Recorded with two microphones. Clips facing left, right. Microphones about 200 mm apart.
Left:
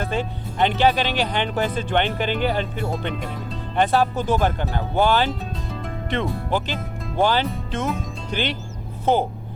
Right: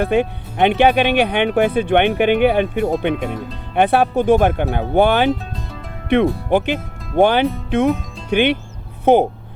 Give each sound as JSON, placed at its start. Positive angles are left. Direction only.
{"t": 0.0, "sound": "speech", "side_deg": -60}